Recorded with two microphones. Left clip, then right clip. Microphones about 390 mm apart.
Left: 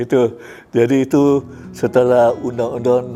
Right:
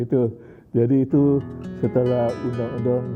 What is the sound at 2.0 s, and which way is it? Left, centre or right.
Speech, centre.